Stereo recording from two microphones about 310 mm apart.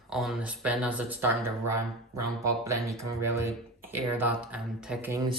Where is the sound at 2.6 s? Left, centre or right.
Centre.